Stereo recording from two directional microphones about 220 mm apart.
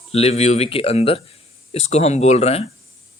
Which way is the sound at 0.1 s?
30° left (ahead or behind).